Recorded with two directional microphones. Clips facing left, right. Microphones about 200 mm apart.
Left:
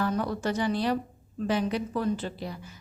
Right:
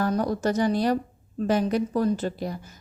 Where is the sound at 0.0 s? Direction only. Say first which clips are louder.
Right 4 dB; 40° right (ahead or behind).